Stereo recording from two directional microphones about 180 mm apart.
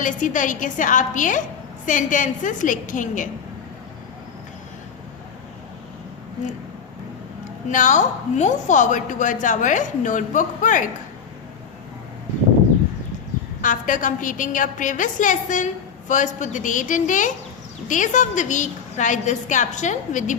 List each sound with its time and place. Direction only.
0.0 s a woman's voice: 45° left (ahead or behind)
7.7 s a woman's voice: 45° left (ahead or behind)
13.6 s a woman's voice: 45° left (ahead or behind)